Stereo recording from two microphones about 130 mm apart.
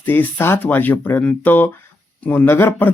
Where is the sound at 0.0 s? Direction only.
15° left (ahead or behind).